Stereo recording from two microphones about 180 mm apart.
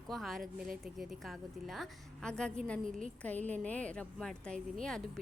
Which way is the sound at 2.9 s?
45° right (ahead or behind).